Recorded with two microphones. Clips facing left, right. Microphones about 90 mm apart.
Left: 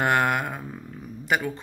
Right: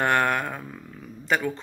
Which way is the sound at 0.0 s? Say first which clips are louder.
Even; 15° left (ahead or behind).